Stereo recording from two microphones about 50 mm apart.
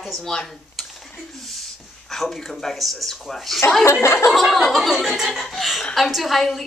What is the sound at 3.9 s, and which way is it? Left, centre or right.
Speech, left.